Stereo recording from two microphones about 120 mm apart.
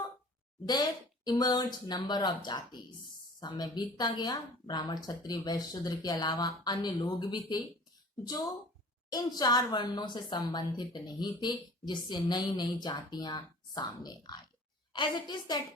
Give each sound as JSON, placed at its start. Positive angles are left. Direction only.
{"t": 0.7, "sound": "a woman's voice", "side_deg": 35}